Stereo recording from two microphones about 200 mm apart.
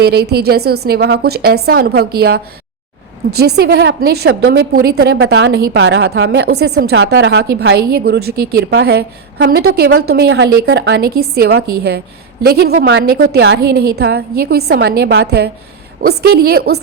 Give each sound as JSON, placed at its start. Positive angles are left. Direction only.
{"t": 0.0, "sound": "a woman's voice", "side_deg": -55}
{"t": 7.0, "sound": "a woman's voice", "side_deg": -70}